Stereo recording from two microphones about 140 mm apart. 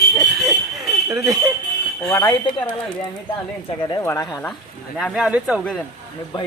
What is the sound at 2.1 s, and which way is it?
Speech, 30° left (ahead or behind).